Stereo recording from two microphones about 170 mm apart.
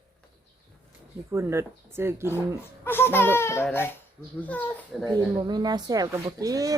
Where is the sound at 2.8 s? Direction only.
15° left (ahead or behind).